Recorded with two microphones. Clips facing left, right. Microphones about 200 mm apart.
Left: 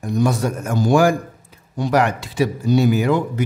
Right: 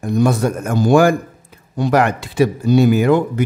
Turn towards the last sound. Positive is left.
turn(degrees=-55)  # may be behind; listen again after turning